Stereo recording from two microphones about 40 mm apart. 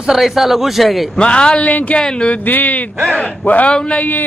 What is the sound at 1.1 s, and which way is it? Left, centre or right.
Speech, left.